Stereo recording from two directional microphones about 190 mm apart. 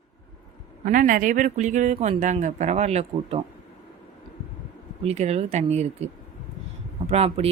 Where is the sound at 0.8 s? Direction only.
45° right (ahead or behind).